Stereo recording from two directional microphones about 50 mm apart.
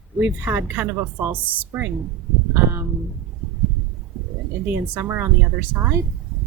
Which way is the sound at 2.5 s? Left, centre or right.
Right.